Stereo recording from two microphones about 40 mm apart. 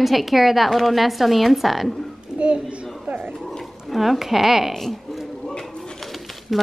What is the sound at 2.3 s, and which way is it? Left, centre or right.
Speech, right.